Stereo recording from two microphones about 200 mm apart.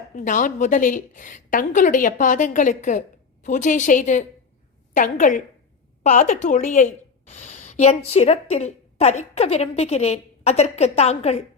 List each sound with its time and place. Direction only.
0.2 s a woman's voice: 40° left (ahead or behind)